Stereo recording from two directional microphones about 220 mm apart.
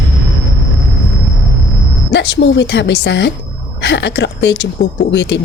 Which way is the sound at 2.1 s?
50° left (ahead or behind).